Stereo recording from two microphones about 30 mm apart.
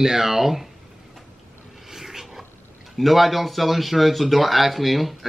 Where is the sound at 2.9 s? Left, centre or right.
Centre.